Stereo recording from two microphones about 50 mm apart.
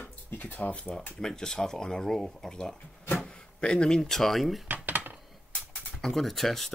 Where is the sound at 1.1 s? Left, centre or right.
Centre.